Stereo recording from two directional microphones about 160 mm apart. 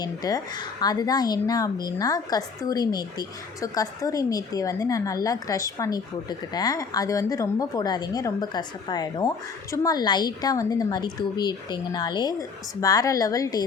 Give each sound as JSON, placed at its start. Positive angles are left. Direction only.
{"t": 0.0, "sound": "speech", "side_deg": 25}